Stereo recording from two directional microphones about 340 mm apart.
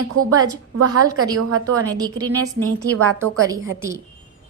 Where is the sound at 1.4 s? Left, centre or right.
Right.